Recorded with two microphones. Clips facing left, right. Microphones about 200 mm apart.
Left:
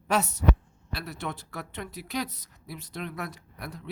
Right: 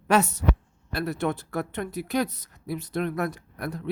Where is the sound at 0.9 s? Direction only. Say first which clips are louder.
Right 9 dB; 50° right (ahead or behind).